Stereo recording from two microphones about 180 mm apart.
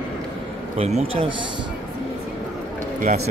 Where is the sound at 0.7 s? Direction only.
35° right (ahead or behind).